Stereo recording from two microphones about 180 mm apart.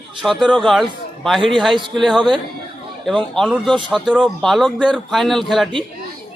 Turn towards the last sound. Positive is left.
turn(degrees=0)  # may be behind; listen again after turning